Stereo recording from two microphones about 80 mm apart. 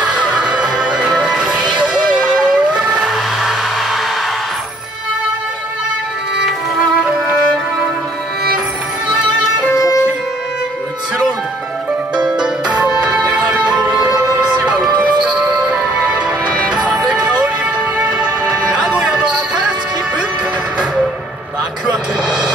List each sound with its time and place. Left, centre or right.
0.0 s music: centre
2.2 s vehicle: centre
9.7 s music: left
12.2 s music: centre
15.2 s music: centre